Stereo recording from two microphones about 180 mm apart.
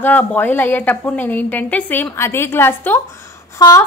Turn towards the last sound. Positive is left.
turn(degrees=20)  # may be behind; listen again after turning